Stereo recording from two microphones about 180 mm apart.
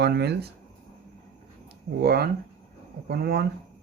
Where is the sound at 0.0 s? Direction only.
65° right (ahead or behind).